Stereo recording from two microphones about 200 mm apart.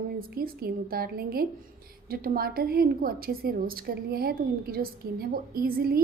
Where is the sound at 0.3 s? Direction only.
50° right (ahead or behind).